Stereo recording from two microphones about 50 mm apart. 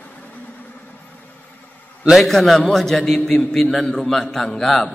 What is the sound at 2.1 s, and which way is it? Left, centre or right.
A man's voice, centre.